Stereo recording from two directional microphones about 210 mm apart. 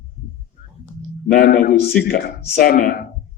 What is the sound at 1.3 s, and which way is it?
A man's voice, 45° left (ahead or behind).